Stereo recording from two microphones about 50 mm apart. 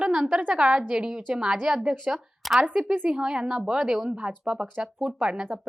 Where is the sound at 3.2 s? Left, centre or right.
Centre.